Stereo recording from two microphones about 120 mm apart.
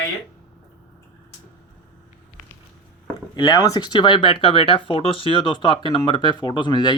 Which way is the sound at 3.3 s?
45° left (ahead or behind).